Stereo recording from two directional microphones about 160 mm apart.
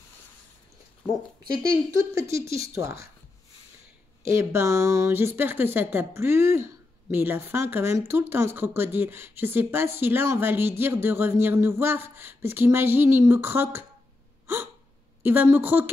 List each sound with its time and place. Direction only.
1.9 s speech: 15° right (ahead or behind)
4.2 s speech: 15° right (ahead or behind)
15.2 s speech: 10° right (ahead or behind)